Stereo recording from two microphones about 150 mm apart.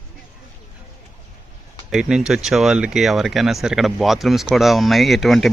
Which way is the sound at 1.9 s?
5° right (ahead or behind).